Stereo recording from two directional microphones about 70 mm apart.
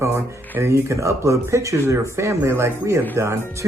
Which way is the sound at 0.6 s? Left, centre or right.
Right.